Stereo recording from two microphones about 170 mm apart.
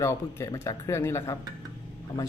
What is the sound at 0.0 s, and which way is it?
Speech, 15° left (ahead or behind).